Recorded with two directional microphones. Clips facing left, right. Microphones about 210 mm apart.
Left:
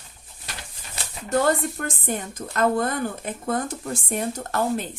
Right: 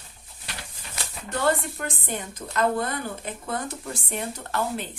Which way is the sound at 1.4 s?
45° left (ahead or behind).